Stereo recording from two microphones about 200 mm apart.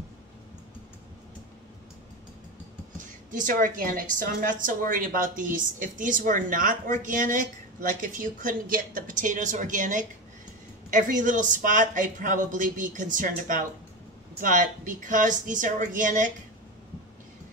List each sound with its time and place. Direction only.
3.3 s speech: 40° right (ahead or behind)